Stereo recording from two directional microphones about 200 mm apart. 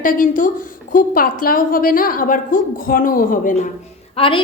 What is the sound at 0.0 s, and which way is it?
A woman's voice, 40° left (ahead or behind).